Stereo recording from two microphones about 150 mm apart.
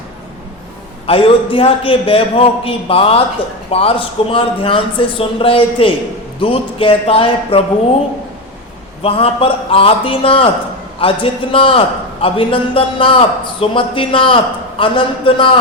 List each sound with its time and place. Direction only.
1.0 s a man's voice: 35° left (ahead or behind)
9.0 s a man's voice: 40° left (ahead or behind)